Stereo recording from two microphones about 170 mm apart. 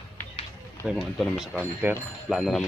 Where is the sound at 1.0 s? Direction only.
Centre (ahead or behind).